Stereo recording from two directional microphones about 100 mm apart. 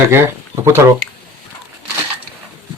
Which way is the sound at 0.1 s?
25° right (ahead or behind).